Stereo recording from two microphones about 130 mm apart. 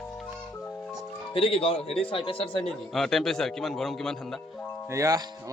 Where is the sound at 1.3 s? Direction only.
45° left (ahead or behind).